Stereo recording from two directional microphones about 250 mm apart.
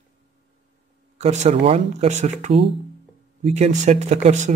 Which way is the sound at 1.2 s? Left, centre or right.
Right.